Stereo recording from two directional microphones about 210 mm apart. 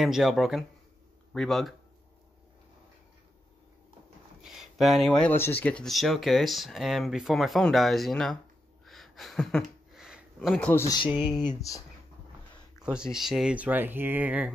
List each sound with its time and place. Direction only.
0.0 s speech: centre (ahead or behind)
4.4 s speech: centre (ahead or behind)
8.8 s a sound: centre (ahead or behind)
11.4 s speech: 15° left (ahead or behind)
12.8 s speech: 5° right (ahead or behind)